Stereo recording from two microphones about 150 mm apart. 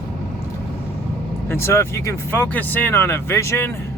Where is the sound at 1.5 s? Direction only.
15° left (ahead or behind).